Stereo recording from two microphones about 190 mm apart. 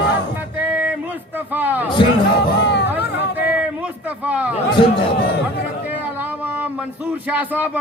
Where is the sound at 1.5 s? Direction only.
10° right (ahead or behind).